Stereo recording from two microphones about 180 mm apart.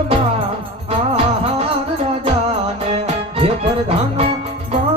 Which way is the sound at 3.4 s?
30° right (ahead or behind).